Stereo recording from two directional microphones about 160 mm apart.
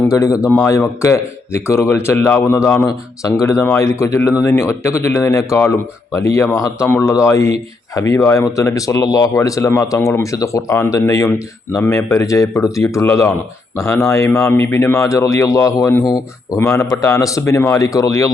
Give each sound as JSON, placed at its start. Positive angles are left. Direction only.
{"t": 0.1, "sound": "speech", "side_deg": 20}